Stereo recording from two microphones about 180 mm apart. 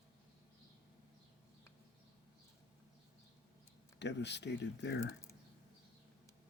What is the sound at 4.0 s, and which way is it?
Speech, 75° left (ahead or behind).